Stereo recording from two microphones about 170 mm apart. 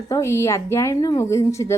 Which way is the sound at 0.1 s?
15° left (ahead or behind).